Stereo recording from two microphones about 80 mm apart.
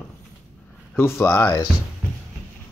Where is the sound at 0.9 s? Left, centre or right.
Left.